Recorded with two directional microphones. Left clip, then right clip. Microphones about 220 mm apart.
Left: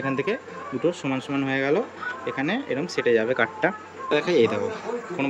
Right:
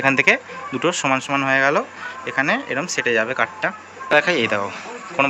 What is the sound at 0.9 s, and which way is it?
Speech, centre (ahead or behind).